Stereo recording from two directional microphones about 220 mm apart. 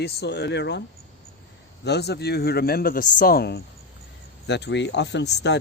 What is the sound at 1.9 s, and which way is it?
Speech, 50° left (ahead or behind).